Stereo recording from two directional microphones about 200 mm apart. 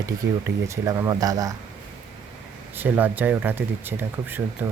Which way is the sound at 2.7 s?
10° right (ahead or behind).